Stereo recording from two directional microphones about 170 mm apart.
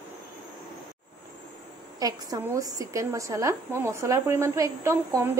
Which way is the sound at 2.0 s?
20° right (ahead or behind).